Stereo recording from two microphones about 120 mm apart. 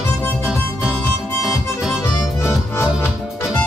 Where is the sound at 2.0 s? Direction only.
20° left (ahead or behind).